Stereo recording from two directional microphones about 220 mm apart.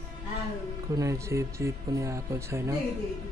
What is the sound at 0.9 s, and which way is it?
Speech, 15° right (ahead or behind).